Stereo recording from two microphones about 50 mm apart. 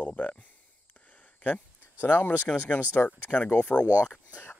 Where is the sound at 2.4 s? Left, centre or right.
Left.